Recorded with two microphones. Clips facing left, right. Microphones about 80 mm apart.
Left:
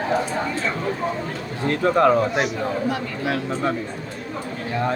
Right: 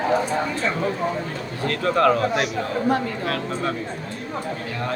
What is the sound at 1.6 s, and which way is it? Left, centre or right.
Speech, left.